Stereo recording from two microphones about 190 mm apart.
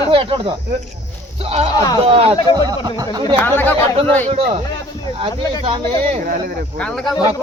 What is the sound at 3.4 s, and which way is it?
Speech, 10° left (ahead or behind).